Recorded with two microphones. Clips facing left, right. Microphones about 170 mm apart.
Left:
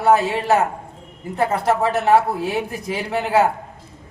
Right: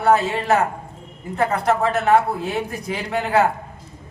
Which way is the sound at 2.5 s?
5° left (ahead or behind).